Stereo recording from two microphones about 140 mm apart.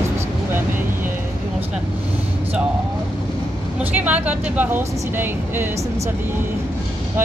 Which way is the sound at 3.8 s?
10° right (ahead or behind).